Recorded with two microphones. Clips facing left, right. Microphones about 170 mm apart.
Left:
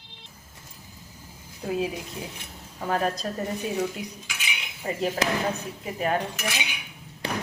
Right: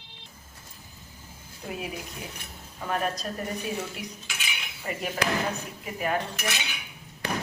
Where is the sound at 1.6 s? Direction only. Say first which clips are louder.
Left 8 dB; 25° left (ahead or behind).